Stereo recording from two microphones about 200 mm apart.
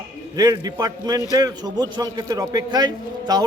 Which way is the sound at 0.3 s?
20° right (ahead or behind).